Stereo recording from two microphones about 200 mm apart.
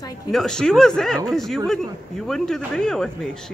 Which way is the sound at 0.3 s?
Centre (ahead or behind).